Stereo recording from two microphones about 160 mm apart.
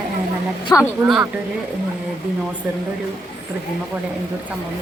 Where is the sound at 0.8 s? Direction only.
Centre (ahead or behind).